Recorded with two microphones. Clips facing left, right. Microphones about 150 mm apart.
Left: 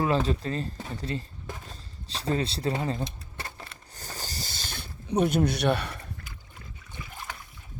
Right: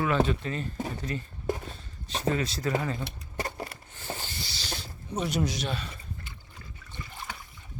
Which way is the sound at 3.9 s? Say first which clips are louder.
Right 2 dB; 40° left (ahead or behind).